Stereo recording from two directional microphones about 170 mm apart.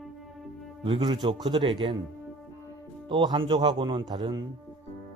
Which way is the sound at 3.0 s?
30° right (ahead or behind).